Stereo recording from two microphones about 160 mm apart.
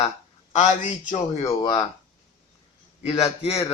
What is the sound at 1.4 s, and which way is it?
Speech, 25° left (ahead or behind).